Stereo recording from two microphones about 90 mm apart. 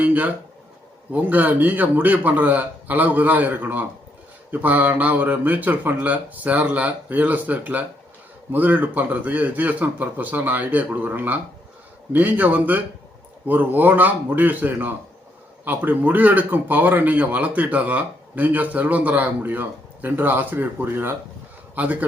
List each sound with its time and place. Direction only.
0.0 s speech: 20° right (ahead or behind)